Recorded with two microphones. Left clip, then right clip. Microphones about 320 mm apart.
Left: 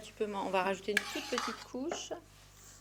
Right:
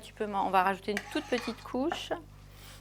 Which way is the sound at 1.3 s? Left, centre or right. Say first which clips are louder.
Right 3 dB; right.